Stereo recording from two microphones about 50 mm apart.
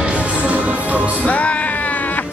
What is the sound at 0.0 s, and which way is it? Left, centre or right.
Music, right.